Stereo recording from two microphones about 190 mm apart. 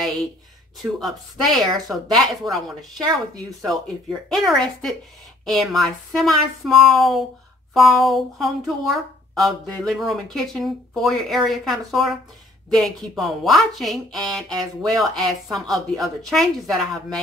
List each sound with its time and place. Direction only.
0.9 s speech: centre (ahead or behind)
3.6 s speech: centre (ahead or behind)
14.5 s speech: 20° right (ahead or behind)
15.0 s speech: centre (ahead or behind)